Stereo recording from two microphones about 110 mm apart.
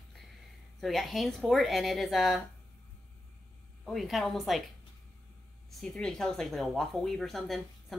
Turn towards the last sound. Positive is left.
turn(degrees=0)  # may be behind; listen again after turning